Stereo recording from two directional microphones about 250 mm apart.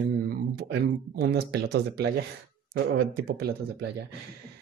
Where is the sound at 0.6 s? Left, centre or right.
Right.